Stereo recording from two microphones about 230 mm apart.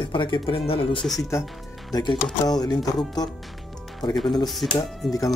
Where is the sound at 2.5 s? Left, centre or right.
Centre.